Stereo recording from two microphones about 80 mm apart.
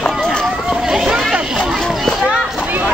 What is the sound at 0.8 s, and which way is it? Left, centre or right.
Hubbub, centre.